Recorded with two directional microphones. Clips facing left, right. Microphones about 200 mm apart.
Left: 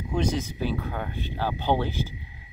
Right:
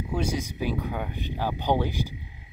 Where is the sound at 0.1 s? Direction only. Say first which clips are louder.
Left 3 dB; 10° right (ahead or behind).